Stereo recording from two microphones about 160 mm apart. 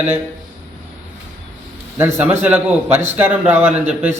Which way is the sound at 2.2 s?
10° right (ahead or behind).